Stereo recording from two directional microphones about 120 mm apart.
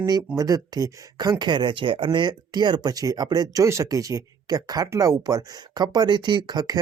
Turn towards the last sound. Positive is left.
turn(degrees=-35)  # may be behind; listen again after turning